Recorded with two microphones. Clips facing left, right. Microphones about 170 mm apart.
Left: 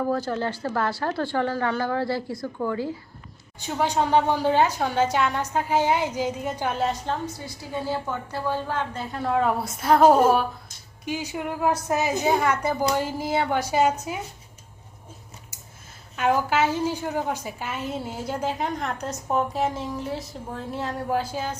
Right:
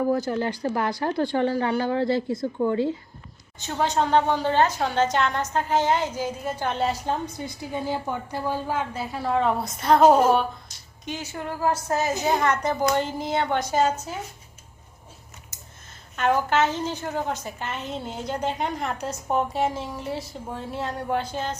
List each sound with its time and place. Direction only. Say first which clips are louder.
0.1 s a woman's voice: right 2 dB; 15° right (ahead or behind)
3.6 s a woman's voice: even; 10° left (ahead or behind)
7.0 s a woman's voice: right 1 dB; 20° right (ahead or behind); by 14.2 s 10° left (ahead or behind)
16.1 s a woman's voice: even; 10° left (ahead or behind)